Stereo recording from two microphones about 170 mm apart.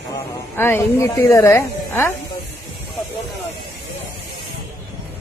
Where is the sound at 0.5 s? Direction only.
15° left (ahead or behind).